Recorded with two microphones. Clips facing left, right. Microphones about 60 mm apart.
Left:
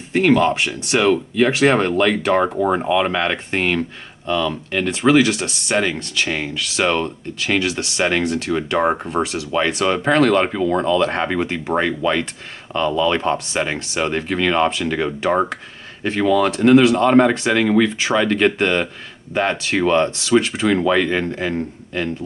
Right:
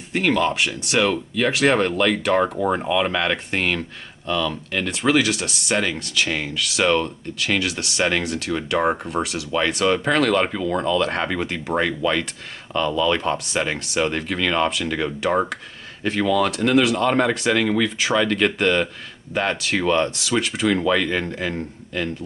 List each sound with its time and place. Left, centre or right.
0.1 s speech: centre